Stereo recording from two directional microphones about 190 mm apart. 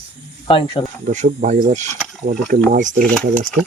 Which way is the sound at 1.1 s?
40° right (ahead or behind).